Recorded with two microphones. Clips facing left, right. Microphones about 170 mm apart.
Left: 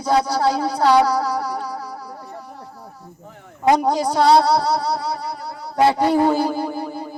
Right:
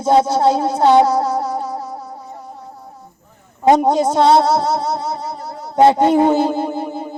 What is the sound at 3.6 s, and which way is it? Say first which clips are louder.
Speech: right 4 dB; 25° right (ahead or behind).